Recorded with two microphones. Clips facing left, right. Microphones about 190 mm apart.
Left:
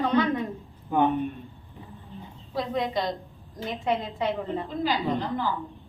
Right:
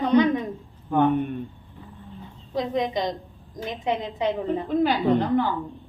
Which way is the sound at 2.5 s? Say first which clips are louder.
Right 3 dB; 20° right (ahead or behind).